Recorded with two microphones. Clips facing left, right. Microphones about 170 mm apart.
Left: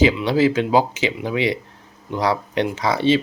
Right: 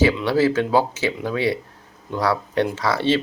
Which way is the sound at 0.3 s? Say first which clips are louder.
Left 1 dB; 15° left (ahead or behind).